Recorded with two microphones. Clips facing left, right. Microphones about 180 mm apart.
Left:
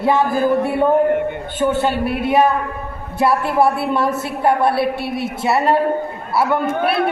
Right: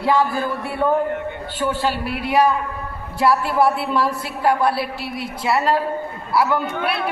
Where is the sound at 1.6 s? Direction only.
20° left (ahead or behind).